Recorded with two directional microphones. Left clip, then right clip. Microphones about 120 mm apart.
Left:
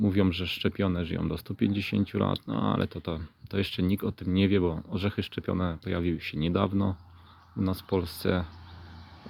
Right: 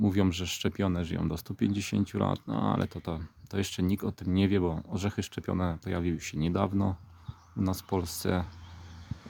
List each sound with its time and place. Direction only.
0.0 s speech: 25° right (ahead or behind)